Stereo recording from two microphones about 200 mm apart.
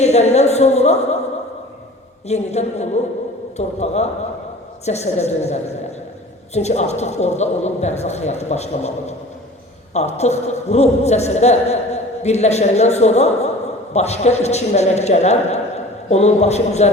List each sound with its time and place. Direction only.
0.0 s a man's voice: 35° left (ahead or behind)
2.2 s a man's voice: 35° left (ahead or behind)